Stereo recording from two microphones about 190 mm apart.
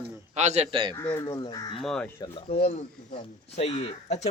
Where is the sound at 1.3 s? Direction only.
20° left (ahead or behind).